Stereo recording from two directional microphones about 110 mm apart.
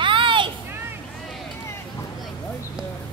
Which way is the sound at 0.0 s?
50° right (ahead or behind).